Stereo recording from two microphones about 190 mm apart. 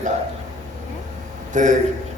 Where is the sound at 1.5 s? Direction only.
40° right (ahead or behind).